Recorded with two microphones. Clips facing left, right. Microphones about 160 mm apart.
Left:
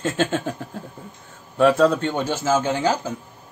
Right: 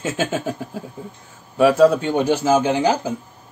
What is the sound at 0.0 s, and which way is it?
Speech, 5° right (ahead or behind).